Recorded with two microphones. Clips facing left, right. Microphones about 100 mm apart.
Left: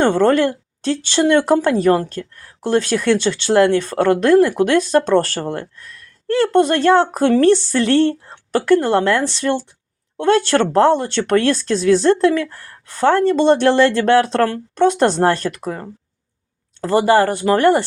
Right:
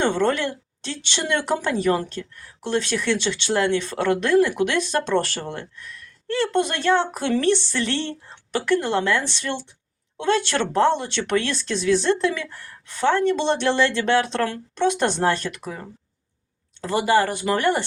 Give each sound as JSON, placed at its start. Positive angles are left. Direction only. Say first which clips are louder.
{"t": 0.0, "sound": "a woman's voice", "louder": "left 7 dB", "side_deg": 40}